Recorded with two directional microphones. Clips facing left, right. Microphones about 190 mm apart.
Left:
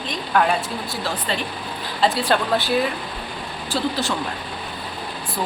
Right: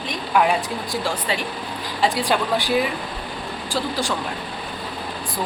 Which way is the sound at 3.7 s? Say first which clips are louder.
Left 2 dB; 10° right (ahead or behind).